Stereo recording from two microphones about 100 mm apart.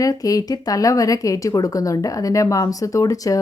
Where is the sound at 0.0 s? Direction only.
35° left (ahead or behind).